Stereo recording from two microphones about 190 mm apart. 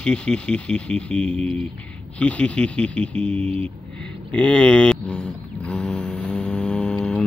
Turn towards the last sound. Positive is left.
turn(degrees=5)  # may be behind; listen again after turning